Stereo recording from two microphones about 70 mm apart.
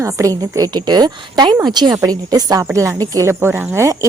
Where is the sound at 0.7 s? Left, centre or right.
Right.